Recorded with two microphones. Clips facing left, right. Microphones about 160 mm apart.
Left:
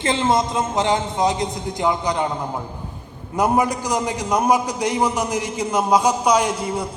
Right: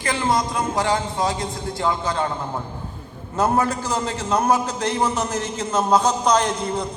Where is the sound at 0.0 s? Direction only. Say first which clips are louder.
Left 3 dB; 25° left (ahead or behind).